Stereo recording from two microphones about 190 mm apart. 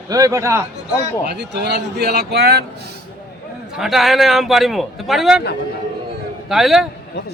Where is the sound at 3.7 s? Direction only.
Centre (ahead or behind).